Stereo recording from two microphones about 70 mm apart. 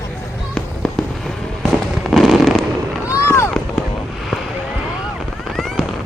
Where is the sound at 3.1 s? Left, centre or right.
Left.